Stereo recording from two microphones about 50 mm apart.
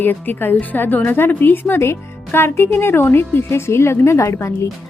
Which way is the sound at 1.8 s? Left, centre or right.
Left.